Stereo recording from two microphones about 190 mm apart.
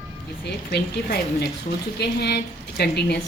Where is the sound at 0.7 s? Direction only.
60° left (ahead or behind).